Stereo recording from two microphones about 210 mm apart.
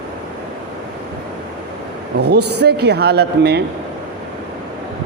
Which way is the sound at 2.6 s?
50° right (ahead or behind).